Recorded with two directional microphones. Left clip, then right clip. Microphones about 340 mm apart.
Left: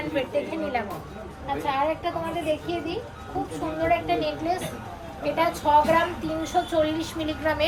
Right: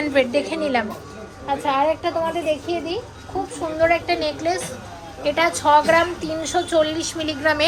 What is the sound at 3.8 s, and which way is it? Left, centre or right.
A woman's voice, right.